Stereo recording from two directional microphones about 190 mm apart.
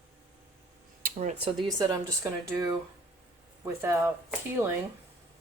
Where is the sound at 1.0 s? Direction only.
40° right (ahead or behind).